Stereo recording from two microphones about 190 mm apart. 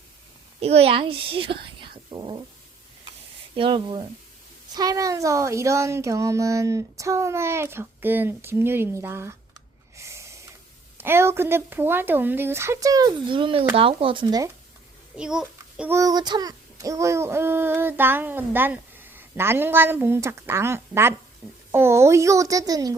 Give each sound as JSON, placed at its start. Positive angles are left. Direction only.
{"t": 0.6, "sound": "a child's voice", "side_deg": -30}
{"t": 3.5, "sound": "speech", "side_deg": -25}
{"t": 4.7, "sound": "child singing", "side_deg": -20}
{"t": 10.0, "sound": "snort", "side_deg": -15}
{"t": 10.9, "sound": "child singing", "side_deg": -10}
{"t": 13.7, "sound": "speech", "side_deg": -30}
{"t": 15.1, "sound": "a child's voice", "side_deg": -5}
{"t": 16.0, "sound": "child singing", "side_deg": -20}